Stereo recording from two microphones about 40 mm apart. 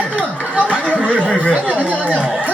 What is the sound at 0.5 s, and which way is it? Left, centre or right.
Speech, right.